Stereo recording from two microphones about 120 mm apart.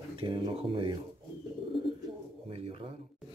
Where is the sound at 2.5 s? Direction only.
55° right (ahead or behind).